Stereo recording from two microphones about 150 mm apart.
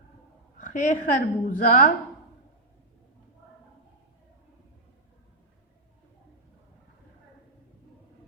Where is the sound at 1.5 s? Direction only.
65° left (ahead or behind).